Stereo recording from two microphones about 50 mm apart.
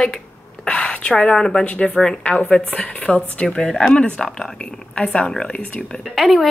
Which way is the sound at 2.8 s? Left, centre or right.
Centre.